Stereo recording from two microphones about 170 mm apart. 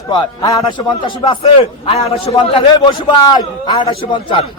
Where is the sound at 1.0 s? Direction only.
35° left (ahead or behind).